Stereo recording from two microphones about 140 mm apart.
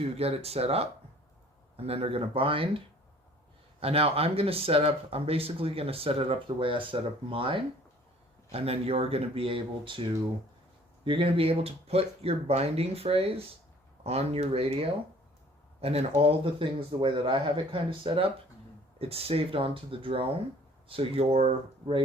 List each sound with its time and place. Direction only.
0.0 s speech: 45° right (ahead or behind)